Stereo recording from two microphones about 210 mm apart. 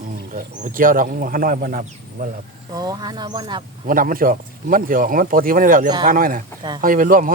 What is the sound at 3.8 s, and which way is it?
Speech, 40° right (ahead or behind).